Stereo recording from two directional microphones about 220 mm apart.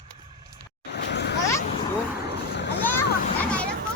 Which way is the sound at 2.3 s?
50° left (ahead or behind).